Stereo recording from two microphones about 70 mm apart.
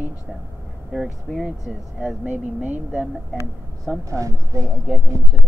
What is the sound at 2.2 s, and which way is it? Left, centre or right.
Speech, right.